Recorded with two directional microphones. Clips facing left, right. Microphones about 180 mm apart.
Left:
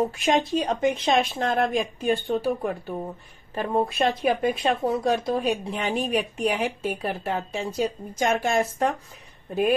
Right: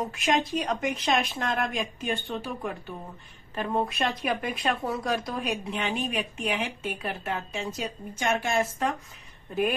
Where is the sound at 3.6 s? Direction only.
30° left (ahead or behind).